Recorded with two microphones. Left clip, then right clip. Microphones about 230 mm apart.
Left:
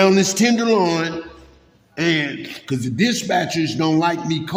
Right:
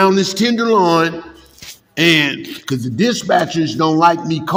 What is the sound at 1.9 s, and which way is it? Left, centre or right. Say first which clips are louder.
Speech: right 7 dB; centre.